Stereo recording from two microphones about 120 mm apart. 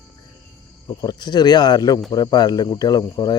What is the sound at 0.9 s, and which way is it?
Speech, 35° left (ahead or behind).